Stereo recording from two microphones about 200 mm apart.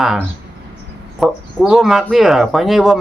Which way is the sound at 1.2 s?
Centre (ahead or behind).